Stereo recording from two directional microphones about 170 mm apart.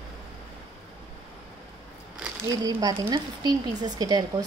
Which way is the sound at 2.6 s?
20° right (ahead or behind).